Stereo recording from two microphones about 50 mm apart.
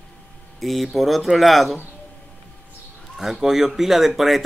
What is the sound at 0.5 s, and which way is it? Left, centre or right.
Speech, centre.